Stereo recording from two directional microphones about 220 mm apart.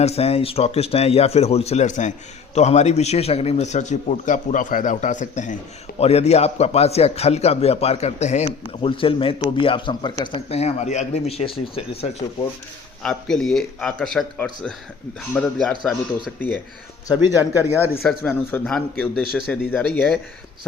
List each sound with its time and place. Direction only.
0.0 s a man's voice: 25° left (ahead or behind)
13.0 s a man's voice: 5° left (ahead or behind)
17.9 s a man's voice: 5° left (ahead or behind)